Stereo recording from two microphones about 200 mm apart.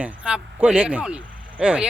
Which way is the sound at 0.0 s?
5° right (ahead or behind).